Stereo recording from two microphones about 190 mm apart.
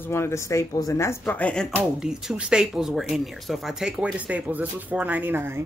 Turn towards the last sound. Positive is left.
turn(degrees=-10)  # may be behind; listen again after turning